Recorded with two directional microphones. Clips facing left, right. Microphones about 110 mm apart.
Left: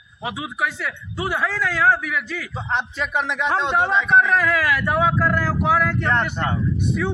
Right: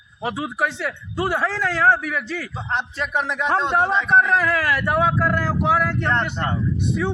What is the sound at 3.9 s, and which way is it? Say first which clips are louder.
Speech: even; 35° right (ahead or behind).